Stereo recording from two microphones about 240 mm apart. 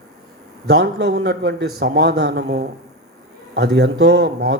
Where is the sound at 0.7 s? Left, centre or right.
Right.